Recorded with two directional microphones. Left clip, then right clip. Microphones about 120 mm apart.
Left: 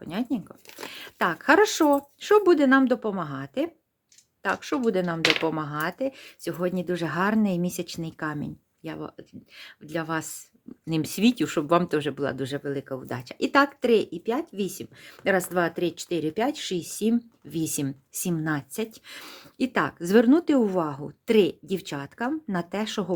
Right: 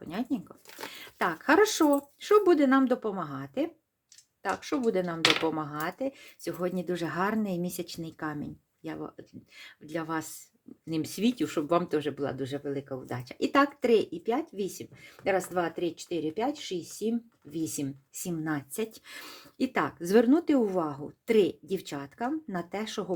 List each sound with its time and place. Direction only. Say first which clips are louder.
0.0 s speech: left 4 dB; 25° left (ahead or behind)